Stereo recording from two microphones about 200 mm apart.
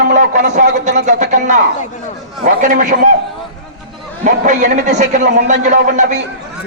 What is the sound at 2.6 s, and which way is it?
Speech, 40° right (ahead or behind).